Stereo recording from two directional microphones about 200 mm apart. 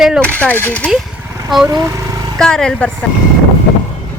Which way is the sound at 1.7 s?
15° right (ahead or behind).